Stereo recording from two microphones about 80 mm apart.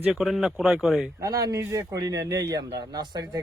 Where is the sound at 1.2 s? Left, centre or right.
Right.